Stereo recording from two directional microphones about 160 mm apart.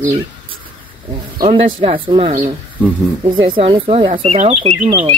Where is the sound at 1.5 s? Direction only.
35° right (ahead or behind).